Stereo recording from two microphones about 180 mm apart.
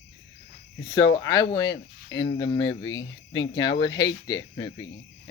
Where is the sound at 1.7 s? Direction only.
80° left.